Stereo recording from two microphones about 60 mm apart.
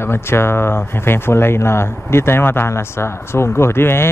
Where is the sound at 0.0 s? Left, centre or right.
Left.